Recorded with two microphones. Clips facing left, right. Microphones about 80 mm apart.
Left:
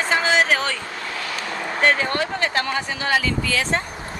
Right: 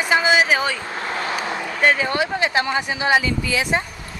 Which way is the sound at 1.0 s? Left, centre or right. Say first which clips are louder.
Right 4 dB; right.